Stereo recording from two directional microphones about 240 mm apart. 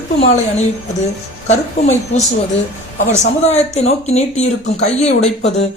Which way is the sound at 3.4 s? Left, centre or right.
Left.